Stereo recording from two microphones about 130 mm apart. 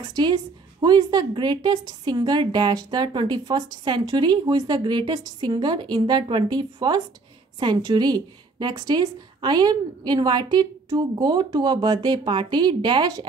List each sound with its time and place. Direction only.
0.0 s a woman's voice: 30° right (ahead or behind)